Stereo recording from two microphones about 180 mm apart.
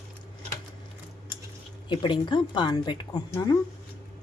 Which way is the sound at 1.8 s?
25° left (ahead or behind).